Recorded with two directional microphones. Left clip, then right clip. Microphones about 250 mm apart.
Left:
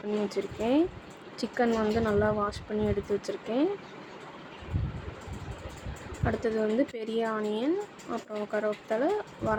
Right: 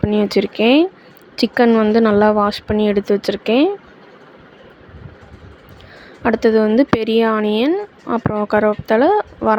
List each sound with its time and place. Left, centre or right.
0.3 s speech: right
6.2 s speech: right